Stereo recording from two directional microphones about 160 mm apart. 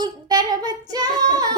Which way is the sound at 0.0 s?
25° right (ahead or behind).